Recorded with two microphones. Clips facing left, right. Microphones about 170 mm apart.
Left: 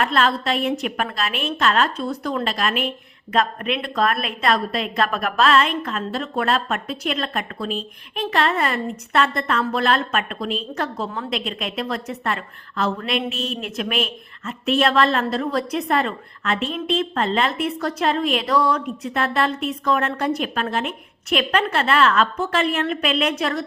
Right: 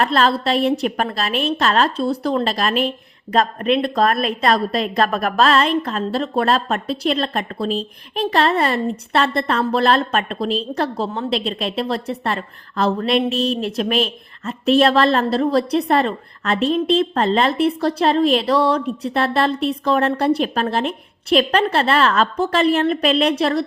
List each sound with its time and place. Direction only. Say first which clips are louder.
0.0 s a woman's voice: right 3 dB; 35° right (ahead or behind)